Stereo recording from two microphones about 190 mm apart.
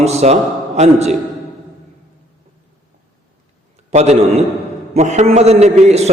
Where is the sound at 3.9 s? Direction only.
35° right (ahead or behind).